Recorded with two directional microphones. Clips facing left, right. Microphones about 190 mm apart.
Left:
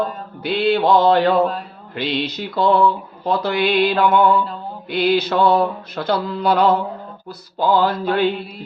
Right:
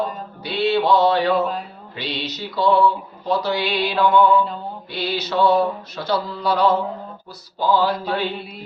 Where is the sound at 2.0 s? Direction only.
55° left (ahead or behind).